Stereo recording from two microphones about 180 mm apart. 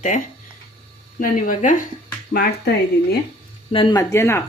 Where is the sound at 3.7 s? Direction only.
25° left (ahead or behind).